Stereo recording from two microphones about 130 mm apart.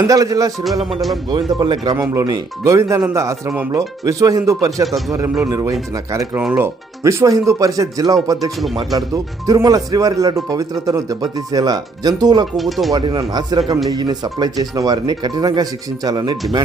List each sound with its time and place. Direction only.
0.1 s speech: 25° right (ahead or behind)
0.6 s speech: centre (ahead or behind)
1.3 s speech: 35° right (ahead or behind)
4.9 s speech: centre (ahead or behind)
5.5 s speech: 25° right (ahead or behind)
12.5 s speech: centre (ahead or behind)
12.9 s speech: 30° right (ahead or behind)